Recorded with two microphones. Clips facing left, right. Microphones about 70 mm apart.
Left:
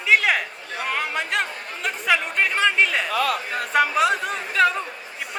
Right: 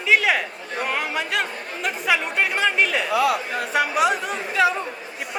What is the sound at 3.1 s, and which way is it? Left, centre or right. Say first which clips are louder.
Speech: right 3 dB; left.